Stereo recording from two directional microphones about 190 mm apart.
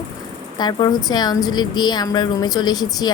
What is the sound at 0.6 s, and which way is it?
A woman's voice, 20° left (ahead or behind).